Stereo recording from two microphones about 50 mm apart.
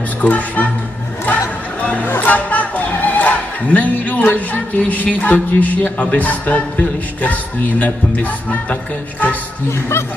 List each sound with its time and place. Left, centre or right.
0.2 s a woman's voice: left
1.2 s music: left
2.0 s speech: left
9.7 s speech: left